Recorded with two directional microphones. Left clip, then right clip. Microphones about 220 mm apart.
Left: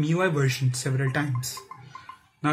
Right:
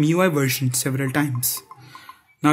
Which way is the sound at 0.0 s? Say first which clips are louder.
Right 6 dB; 40° right (ahead or behind).